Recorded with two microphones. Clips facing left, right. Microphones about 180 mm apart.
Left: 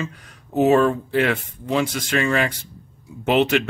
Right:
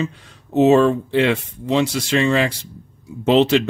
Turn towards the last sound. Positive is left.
turn(degrees=-30)  # may be behind; listen again after turning